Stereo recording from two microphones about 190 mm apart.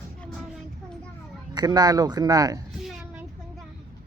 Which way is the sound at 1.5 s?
20° right (ahead or behind).